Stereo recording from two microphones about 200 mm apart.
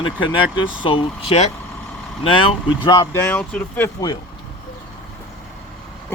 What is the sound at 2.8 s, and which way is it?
Speech, 20° left (ahead or behind).